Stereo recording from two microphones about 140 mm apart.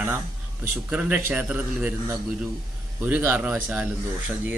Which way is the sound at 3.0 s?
15° right (ahead or behind).